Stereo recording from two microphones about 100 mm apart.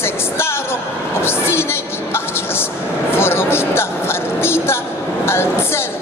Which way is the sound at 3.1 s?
25° left (ahead or behind).